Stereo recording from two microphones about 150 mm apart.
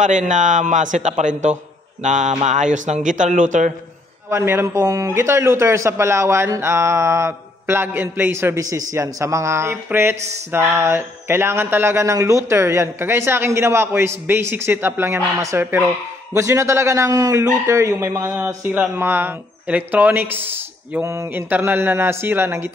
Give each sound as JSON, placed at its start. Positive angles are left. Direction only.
{"t": 0.0, "sound": "a man's voice", "side_deg": -55}
{"t": 4.3, "sound": "a man's voice", "side_deg": -15}